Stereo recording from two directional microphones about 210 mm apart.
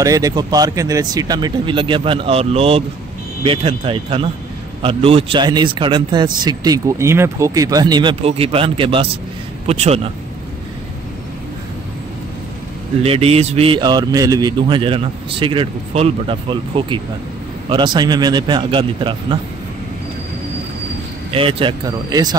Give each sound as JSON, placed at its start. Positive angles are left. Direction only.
{"t": 0.0, "sound": "a man's voice", "side_deg": -15}
{"t": 13.0, "sound": "a man's voice", "side_deg": -30}
{"t": 21.3, "sound": "a man's voice", "side_deg": -25}